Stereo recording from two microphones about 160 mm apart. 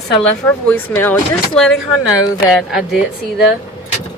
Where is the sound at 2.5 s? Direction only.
5° right (ahead or behind).